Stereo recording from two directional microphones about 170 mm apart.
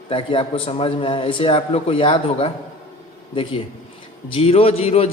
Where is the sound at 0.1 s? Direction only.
30° left (ahead or behind).